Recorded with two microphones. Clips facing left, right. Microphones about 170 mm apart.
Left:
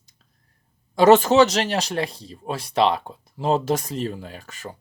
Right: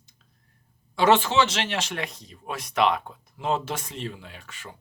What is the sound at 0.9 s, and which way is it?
Speech, 40° left (ahead or behind).